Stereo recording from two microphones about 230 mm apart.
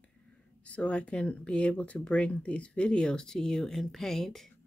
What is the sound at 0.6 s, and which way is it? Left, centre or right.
Speech, centre.